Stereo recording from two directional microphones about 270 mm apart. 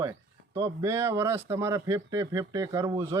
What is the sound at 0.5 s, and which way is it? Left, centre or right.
Speech, centre.